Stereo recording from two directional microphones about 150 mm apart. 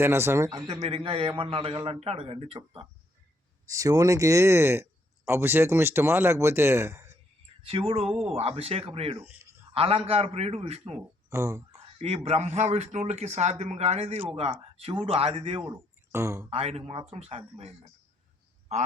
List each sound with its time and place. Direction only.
0.0 s speech: 15° right (ahead or behind)
0.8 s a man's voice: 45° right (ahead or behind)
3.7 s speech: 25° right (ahead or behind)
7.6 s a man's voice: 35° right (ahead or behind)
10.9 s speech: 20° right (ahead or behind)
11.9 s a man's voice: 45° right (ahead or behind)
15.7 s speech: 20° right (ahead or behind)
16.5 s speech: 45° right (ahead or behind)